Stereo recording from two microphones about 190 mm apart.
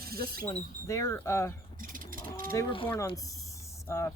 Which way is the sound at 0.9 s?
15° left (ahead or behind).